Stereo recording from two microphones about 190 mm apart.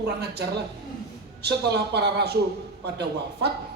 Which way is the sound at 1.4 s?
60° right (ahead or behind).